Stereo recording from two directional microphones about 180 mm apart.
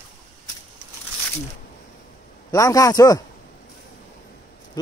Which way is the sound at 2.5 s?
20° left (ahead or behind).